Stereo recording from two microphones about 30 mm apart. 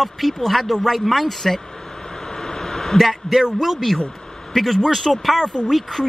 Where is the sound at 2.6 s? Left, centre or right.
Centre.